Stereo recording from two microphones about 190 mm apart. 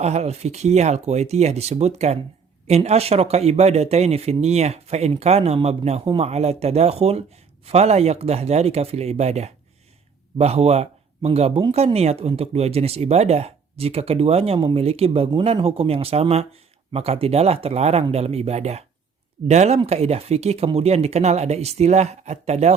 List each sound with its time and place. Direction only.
0.0 s speech: 35° right (ahead or behind)